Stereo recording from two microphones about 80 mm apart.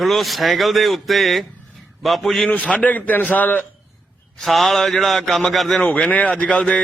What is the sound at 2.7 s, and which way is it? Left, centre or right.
Speech, centre.